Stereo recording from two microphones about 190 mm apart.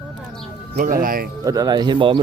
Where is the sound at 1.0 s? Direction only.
50° right (ahead or behind).